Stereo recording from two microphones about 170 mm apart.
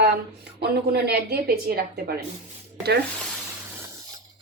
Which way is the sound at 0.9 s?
70° right (ahead or behind).